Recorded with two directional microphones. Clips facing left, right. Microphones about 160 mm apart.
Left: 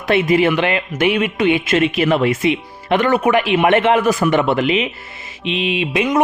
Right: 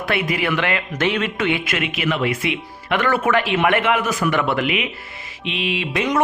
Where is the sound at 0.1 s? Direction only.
25° left (ahead or behind).